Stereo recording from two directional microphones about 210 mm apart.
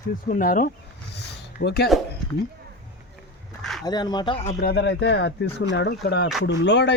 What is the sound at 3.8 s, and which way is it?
Speech, 20° left (ahead or behind).